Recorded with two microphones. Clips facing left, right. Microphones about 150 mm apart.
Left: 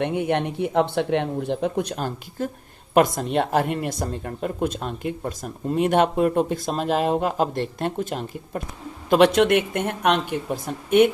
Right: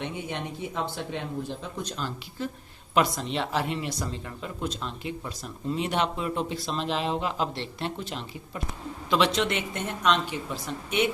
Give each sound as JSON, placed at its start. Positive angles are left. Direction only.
{"t": 0.0, "sound": "a woman's voice", "side_deg": 60}